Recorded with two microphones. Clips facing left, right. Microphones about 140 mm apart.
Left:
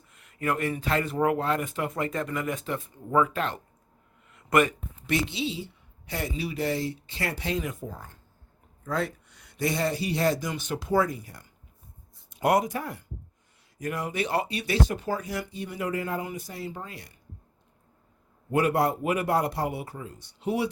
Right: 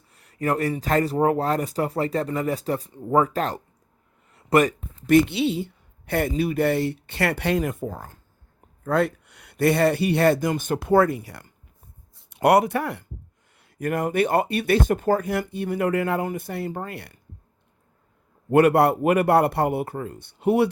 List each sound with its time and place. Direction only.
0.1 s speech: 35° right (ahead or behind)
5.1 s speech: 60° right (ahead or behind)
8.8 s speech: 60° right (ahead or behind)
13.7 s speech: 55° right (ahead or behind)
18.5 s speech: 65° right (ahead or behind)